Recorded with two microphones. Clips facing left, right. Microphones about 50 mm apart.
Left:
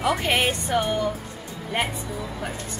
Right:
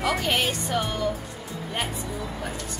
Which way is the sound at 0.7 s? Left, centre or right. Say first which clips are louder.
Left 3 dB; centre.